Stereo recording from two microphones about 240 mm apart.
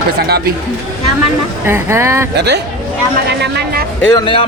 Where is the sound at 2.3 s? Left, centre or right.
Right.